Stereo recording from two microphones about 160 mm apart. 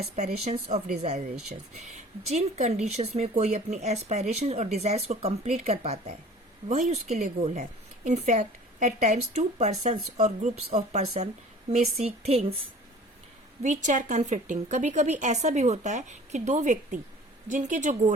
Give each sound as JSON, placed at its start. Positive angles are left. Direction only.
{"t": 0.0, "sound": "speech", "side_deg": -45}
{"t": 13.6, "sound": "speech", "side_deg": -50}